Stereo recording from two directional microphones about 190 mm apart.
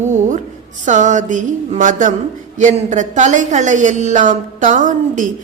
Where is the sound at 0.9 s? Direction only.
40° right (ahead or behind).